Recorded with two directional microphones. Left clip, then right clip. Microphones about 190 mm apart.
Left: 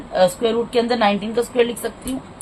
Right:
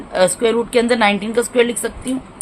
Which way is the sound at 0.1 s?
40° right (ahead or behind).